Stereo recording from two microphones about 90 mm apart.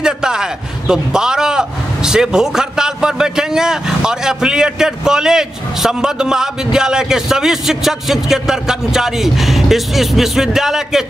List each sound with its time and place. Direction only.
0.0 s a man's voice: 10° right (ahead or behind)